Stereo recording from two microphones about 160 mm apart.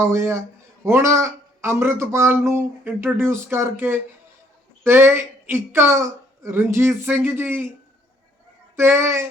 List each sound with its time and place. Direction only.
0.1 s speech: 15° right (ahead or behind)
8.7 s speech: 15° right (ahead or behind)